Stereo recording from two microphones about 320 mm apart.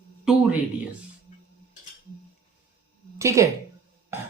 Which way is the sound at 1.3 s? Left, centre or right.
Left.